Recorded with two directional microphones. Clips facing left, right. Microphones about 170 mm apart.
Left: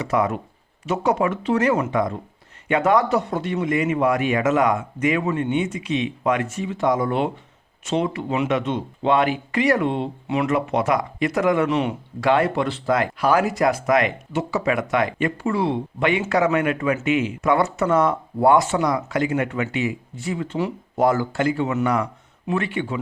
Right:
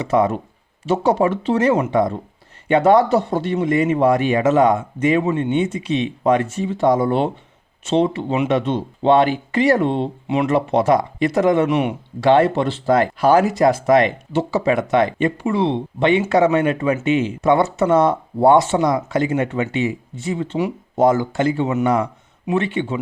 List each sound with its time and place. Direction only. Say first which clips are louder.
0.0 s speech: right 4 dB; 25° right (ahead or behind)